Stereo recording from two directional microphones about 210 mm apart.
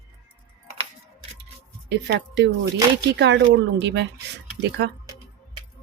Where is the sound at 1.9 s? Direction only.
55° right (ahead or behind).